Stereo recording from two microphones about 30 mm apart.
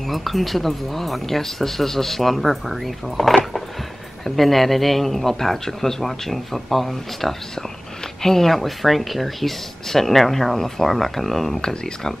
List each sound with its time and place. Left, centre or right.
0.0 s speech: centre
8.5 s speech: centre
11.6 s speech: left